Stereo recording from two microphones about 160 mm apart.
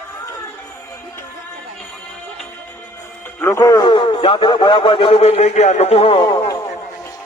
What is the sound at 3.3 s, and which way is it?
A man's voice, 15° left (ahead or behind).